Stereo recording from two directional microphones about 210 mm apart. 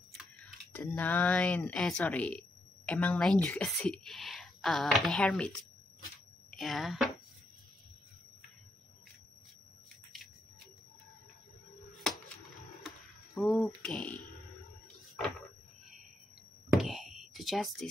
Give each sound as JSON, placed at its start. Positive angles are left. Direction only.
{"t": 0.7, "sound": "a woman's voice", "side_deg": 10}
{"t": 6.5, "sound": "speech", "side_deg": 0}
{"t": 13.4, "sound": "a woman's voice", "side_deg": 0}
{"t": 16.7, "sound": "a sound", "side_deg": 0}